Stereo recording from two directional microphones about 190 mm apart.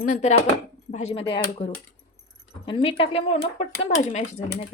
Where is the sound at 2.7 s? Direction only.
30° left (ahead or behind).